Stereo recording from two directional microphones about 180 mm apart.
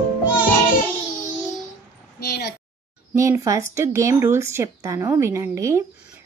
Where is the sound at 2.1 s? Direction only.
60° left (ahead or behind).